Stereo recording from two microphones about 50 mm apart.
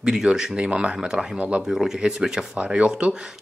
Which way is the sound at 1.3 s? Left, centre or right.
Right.